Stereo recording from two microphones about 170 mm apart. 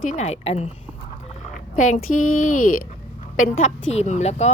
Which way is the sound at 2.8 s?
45° left (ahead or behind).